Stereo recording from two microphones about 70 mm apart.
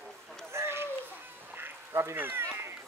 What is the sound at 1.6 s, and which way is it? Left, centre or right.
Duck, right.